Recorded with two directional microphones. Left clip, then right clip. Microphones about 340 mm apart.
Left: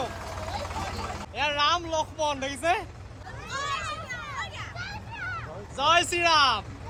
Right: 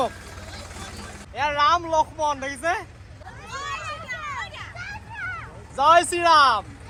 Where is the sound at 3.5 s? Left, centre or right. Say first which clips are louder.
Even; centre.